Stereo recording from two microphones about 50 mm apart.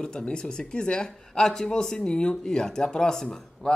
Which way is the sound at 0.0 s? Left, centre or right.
Centre.